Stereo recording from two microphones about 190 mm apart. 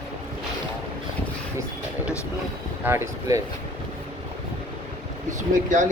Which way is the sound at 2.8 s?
15° right (ahead or behind).